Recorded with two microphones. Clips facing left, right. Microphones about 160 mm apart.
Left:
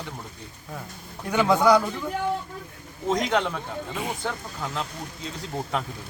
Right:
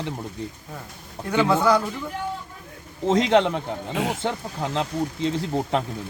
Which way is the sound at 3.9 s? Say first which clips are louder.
Right 7 dB; 80° right.